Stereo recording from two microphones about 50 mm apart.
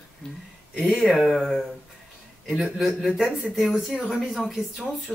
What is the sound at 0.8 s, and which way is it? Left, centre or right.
Speech, centre.